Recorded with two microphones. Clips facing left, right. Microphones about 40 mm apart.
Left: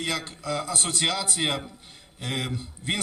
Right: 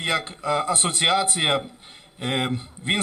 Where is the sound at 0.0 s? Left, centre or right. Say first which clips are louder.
Right 5 dB; right.